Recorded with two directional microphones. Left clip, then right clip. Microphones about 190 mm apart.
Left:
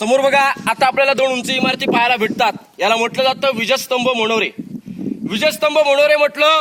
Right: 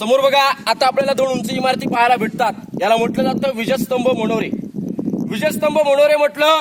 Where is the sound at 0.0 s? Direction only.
60° right (ahead or behind).